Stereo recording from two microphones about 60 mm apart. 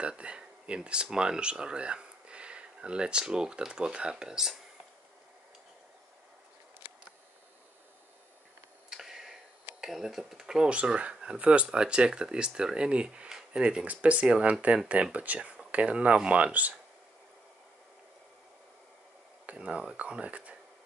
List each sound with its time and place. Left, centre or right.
0.0 s speech: centre
8.9 s tick: centre
9.8 s speech: centre; by 16.7 s right
19.4 s speech: right